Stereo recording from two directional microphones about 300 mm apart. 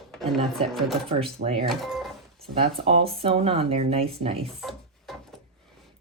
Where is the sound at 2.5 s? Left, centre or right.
Centre.